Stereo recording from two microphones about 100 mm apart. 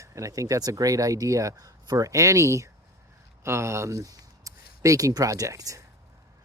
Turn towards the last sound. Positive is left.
turn(degrees=-35)  # may be behind; listen again after turning